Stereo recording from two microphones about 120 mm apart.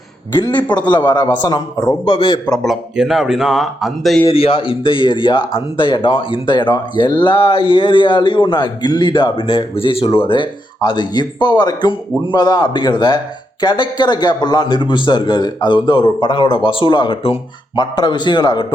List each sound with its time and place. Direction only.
0.3 s a man's voice: 35° left (ahead or behind)
2.5 s speech: centre (ahead or behind)
4.2 s a man's voice: 50° left (ahead or behind)